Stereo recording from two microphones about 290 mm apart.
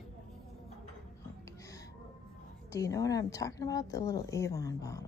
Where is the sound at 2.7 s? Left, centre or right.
Centre.